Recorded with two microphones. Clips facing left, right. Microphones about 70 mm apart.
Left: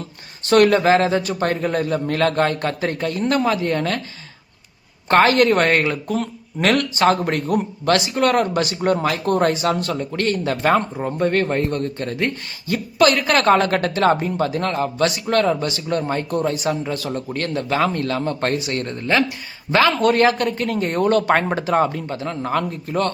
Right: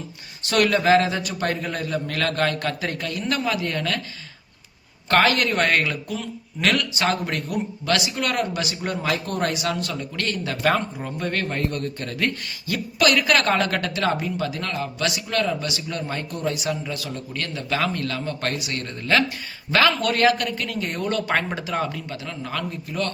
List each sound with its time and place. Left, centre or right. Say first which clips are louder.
0.4 s a man's voice: left 5 dB; left
5.0 s a man's voice: left 5 dB; left